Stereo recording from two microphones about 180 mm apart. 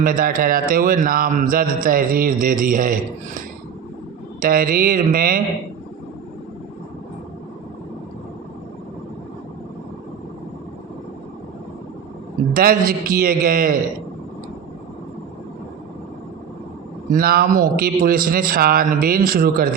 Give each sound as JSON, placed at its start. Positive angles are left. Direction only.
{"t": 0.0, "sound": "speech", "side_deg": -50}
{"t": 12.5, "sound": "speech", "side_deg": -50}
{"t": 17.1, "sound": "speech", "side_deg": -55}